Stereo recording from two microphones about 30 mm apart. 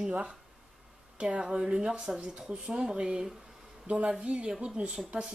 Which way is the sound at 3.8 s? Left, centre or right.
Right.